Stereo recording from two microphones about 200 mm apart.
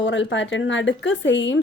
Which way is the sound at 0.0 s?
65° left (ahead or behind).